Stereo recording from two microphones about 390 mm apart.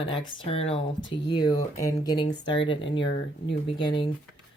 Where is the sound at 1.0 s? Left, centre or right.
Left.